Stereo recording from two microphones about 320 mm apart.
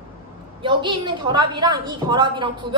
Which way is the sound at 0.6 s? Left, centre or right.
Centre.